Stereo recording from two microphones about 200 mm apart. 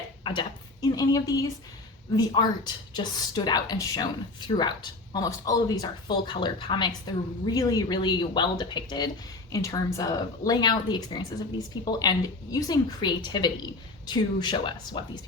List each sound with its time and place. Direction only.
0.3 s a woman's voice: 20° left (ahead or behind)